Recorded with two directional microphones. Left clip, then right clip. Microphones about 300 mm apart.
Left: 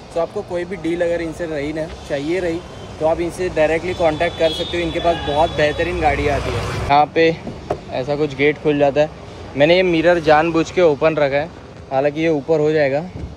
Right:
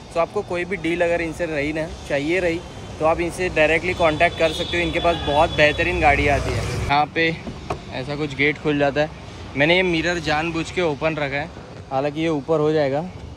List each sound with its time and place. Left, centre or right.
0.9 s speech: centre
12.5 s speech: right